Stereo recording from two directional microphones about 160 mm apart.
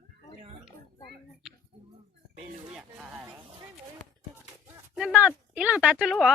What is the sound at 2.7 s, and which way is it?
Music, 5° right (ahead or behind).